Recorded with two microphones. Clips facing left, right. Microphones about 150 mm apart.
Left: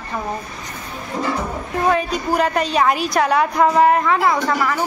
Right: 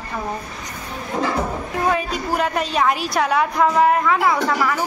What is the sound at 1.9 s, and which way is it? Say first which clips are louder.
A woman's voice: left 3 dB; centre (ahead or behind).